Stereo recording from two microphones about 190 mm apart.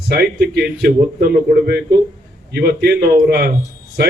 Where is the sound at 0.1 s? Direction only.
60° right (ahead or behind).